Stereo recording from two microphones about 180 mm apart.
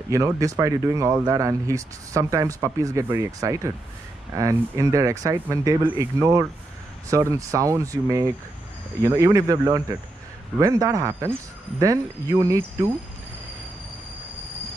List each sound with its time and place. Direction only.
0.1 s speech: 20° right (ahead or behind)